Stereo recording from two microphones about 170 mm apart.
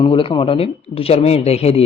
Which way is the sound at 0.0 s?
30° left (ahead or behind).